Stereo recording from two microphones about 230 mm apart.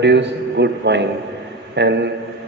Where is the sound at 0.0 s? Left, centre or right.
Right.